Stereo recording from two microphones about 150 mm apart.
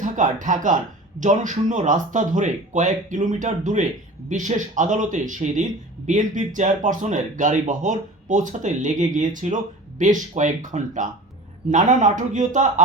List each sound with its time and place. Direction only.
0.0 s speech: 55° right (ahead or behind)